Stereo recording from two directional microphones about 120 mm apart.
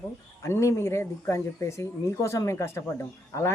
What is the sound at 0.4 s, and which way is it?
Speech, 25° left (ahead or behind).